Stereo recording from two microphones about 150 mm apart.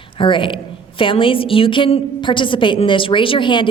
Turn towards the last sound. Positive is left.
turn(degrees=35)  # may be behind; listen again after turning